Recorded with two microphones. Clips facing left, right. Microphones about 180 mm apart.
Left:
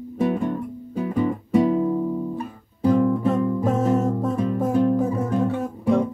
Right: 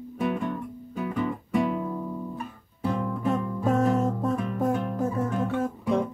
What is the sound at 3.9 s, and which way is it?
Music, centre (ahead or behind).